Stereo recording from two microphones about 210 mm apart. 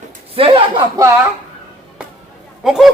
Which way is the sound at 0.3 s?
25° right (ahead or behind).